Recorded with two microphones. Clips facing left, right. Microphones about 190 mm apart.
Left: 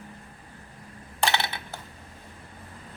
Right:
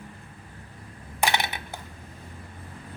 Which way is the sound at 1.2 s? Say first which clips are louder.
Right 1 dB; 15° right (ahead or behind).